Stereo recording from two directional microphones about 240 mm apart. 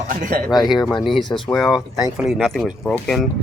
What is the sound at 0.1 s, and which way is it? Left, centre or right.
Speech, right.